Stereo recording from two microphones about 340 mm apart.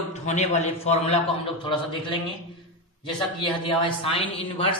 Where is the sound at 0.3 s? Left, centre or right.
Centre.